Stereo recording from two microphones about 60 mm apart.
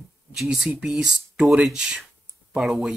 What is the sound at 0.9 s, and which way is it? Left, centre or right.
Speech, centre.